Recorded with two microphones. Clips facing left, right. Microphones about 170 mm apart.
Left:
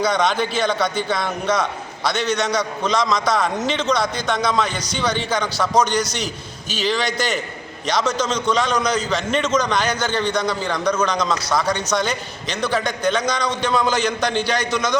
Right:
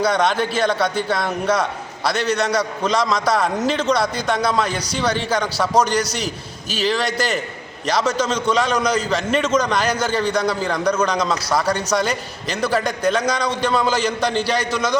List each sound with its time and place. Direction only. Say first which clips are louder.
0.0 s a man's voice: right 1 dB; 5° right (ahead or behind)